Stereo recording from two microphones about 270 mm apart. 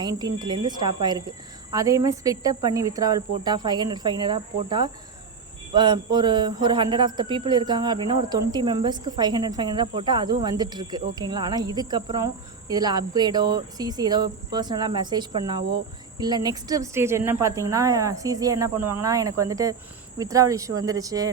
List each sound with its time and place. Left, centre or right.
0.0 s speech: centre